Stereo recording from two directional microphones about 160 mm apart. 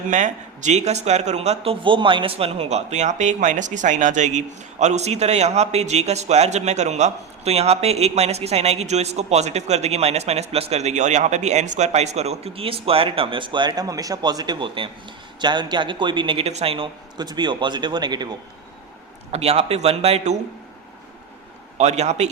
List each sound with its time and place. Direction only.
0.1 s speech: 50° right (ahead or behind); by 18.3 s 25° right (ahead or behind)
19.3 s a man's voice: 40° right (ahead or behind)
21.8 s speech: 45° right (ahead or behind)